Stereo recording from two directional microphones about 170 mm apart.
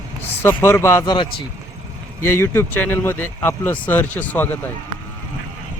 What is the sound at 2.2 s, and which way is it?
Speech, 15° left (ahead or behind).